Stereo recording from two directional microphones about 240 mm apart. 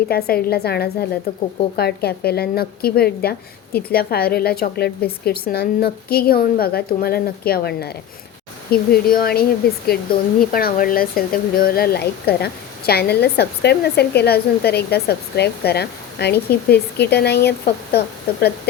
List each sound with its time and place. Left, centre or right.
0.1 s a woman's voice: left